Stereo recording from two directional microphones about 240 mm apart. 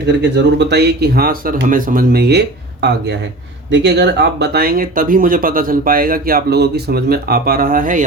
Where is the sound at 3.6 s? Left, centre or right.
Right.